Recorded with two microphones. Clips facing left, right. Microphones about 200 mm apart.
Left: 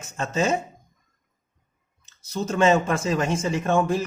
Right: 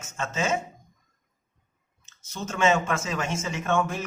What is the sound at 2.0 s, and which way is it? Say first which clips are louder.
Speech: left 7 dB; 35° left (ahead or behind).